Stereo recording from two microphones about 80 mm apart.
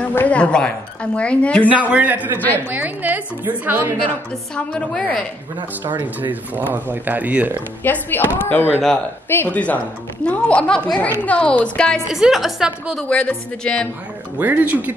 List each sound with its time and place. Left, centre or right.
0.0 s a woman's voice: left
1.7 s a man's voice: centre
4.6 s a woman's voice: centre
5.9 s speech: right
6.7 s a woman's voice: right
7.8 s a woman's voice: left
12.1 s a woman's voice: centre
13.1 s a woman's voice: centre
14.4 s a woman's voice: right